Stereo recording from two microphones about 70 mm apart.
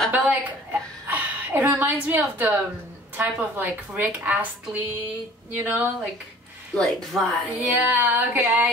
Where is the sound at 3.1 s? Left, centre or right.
Right.